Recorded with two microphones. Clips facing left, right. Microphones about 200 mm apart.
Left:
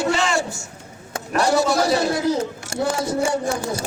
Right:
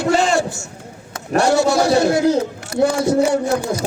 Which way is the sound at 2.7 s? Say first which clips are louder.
Right 9 dB; 30° left (ahead or behind).